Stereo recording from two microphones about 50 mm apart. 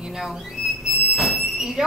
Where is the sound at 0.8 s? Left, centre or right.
Centre.